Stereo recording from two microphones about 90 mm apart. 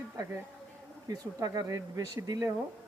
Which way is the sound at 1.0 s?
45° right (ahead or behind).